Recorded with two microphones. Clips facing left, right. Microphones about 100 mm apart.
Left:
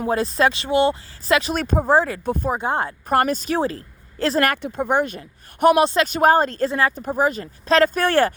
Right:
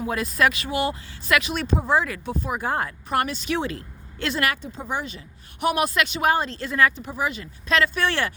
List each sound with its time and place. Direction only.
0.1 s speech: 30° left (ahead or behind)
2.2 s speech: 45° left (ahead or behind)
2.5 s speech: 25° left (ahead or behind)
3.1 s speech: 45° left (ahead or behind)
4.6 s speech: 60° left (ahead or behind)
5.7 s speech: 30° left (ahead or behind)
6.1 s speech: 45° left (ahead or behind)
6.7 s speech: 30° left (ahead or behind)
6.9 s speech: 45° left (ahead or behind)